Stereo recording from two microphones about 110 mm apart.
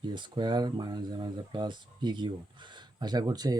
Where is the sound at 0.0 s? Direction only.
45° right (ahead or behind).